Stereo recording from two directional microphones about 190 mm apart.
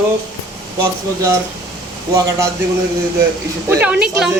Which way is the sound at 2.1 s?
15° right (ahead or behind).